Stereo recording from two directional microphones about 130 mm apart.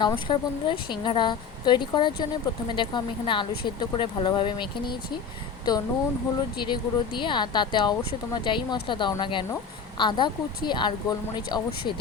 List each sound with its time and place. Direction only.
0.0 s a woman's voice: 40° left (ahead or behind)